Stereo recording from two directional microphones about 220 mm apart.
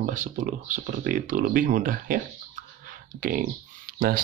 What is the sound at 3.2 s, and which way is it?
Speech, 35° right (ahead or behind).